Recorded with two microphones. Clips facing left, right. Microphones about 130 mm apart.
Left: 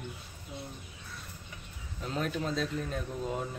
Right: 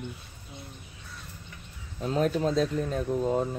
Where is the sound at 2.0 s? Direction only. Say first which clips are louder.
Right 8 dB; 40° right (ahead or behind).